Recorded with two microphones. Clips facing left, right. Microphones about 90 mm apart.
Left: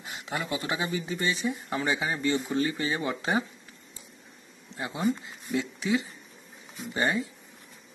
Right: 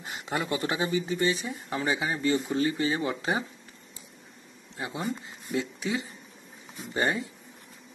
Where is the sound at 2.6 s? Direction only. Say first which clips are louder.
Right 2 dB; 25° right (ahead or behind).